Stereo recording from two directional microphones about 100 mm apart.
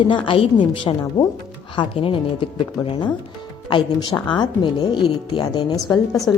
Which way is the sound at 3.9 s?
45° left (ahead or behind).